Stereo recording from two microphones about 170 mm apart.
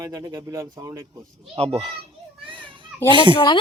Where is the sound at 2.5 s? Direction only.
30° right (ahead or behind).